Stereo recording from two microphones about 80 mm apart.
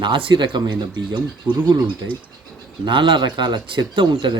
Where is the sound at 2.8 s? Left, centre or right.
Right.